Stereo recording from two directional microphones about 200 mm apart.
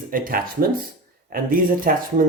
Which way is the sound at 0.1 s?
45° right (ahead or behind).